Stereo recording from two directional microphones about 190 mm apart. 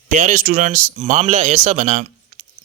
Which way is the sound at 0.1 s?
40° right (ahead or behind).